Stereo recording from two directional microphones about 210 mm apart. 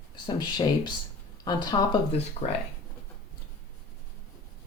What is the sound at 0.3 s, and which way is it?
Speech, 20° left (ahead or behind).